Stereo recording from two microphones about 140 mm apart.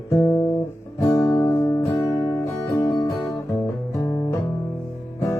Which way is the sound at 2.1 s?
25° left (ahead or behind).